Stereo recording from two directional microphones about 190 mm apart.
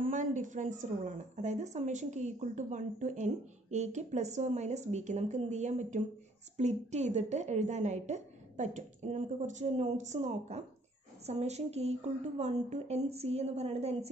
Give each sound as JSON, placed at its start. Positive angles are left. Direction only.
{"t": 0.0, "sound": "a woman's voice", "side_deg": -40}